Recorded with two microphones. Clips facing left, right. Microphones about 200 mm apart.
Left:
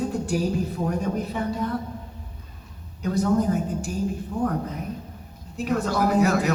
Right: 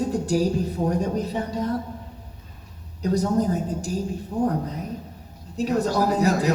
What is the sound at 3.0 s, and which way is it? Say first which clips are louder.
Speech: even; 35° right (ahead or behind).